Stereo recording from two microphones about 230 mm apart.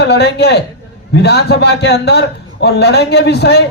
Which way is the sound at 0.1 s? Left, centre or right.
Left.